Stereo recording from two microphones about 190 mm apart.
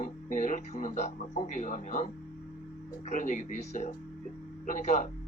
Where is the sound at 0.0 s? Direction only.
40° left (ahead or behind).